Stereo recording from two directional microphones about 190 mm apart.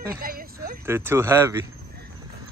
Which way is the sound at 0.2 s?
50° right (ahead or behind).